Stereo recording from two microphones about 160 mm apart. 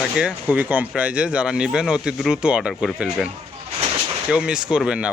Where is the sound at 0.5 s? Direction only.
10° right (ahead or behind).